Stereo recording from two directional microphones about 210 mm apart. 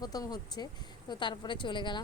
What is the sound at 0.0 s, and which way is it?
Speech, 20° left (ahead or behind).